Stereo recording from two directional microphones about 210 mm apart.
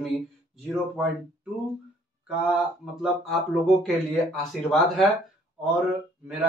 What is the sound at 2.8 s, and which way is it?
Speech, centre (ahead or behind).